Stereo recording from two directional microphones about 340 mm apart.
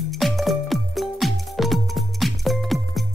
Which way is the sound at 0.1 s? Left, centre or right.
Centre.